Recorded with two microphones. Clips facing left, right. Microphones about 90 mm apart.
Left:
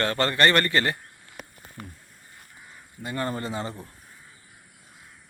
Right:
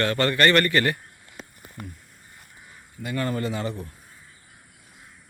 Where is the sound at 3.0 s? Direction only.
30° left (ahead or behind).